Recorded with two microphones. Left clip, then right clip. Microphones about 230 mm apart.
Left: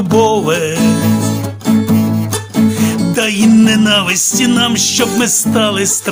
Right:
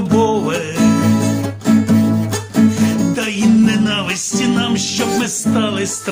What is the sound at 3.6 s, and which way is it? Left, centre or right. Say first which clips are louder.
Music: left 6 dB; left.